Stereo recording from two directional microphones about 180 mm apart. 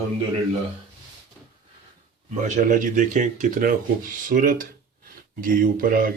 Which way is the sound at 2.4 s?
45° right (ahead or behind).